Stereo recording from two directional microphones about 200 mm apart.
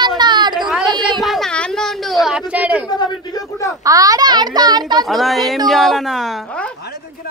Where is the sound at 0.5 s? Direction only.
Centre (ahead or behind).